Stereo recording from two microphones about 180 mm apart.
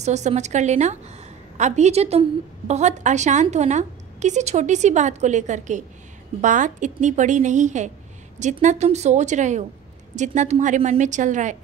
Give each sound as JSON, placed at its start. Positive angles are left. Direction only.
{"t": 0.0, "sound": "a woman's voice", "side_deg": -40}